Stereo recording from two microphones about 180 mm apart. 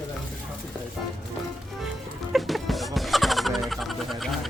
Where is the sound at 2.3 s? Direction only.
Centre (ahead or behind).